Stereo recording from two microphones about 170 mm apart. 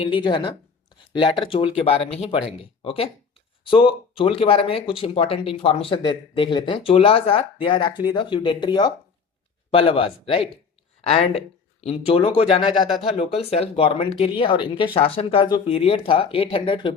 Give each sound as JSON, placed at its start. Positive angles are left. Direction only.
{"t": 0.0, "sound": "speech", "side_deg": 30}